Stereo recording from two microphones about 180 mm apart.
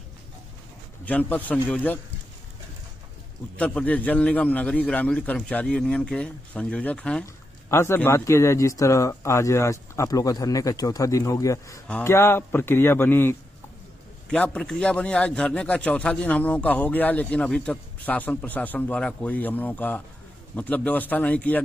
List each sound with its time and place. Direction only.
1.0 s a man's voice: 10° left (ahead or behind)
3.5 s a man's voice: 5° left (ahead or behind)